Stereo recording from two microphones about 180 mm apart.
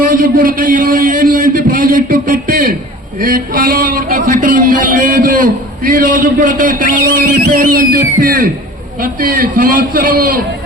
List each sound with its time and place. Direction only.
0.0 s a man's voice: 50° right (ahead or behind)